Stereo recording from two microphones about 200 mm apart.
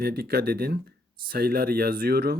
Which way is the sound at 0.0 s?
50° right (ahead or behind).